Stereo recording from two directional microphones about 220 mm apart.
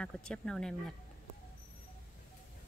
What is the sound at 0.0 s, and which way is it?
Speech, 5° left (ahead or behind).